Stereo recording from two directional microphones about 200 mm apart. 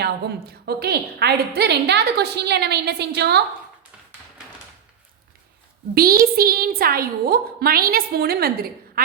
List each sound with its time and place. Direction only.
0.0 s a woman's voice: 50° right (ahead or behind)
5.9 s a woman's voice: 50° right (ahead or behind)